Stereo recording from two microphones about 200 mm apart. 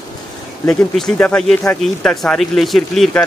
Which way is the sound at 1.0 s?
5° left (ahead or behind).